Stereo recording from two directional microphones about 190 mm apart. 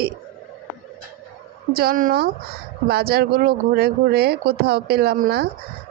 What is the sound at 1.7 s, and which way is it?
A woman's voice, 50° right (ahead or behind).